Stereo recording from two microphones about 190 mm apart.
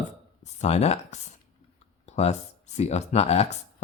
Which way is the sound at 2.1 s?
35° left (ahead or behind).